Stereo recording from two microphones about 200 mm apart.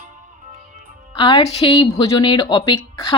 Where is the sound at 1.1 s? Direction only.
25° left (ahead or behind).